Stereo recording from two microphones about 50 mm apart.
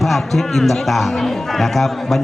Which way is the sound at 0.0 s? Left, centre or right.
Centre.